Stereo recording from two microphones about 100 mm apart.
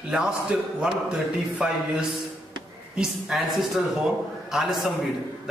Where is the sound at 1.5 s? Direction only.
5° right (ahead or behind).